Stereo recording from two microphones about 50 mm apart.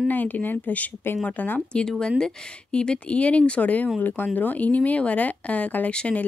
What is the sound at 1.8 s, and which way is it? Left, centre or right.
Speech, centre.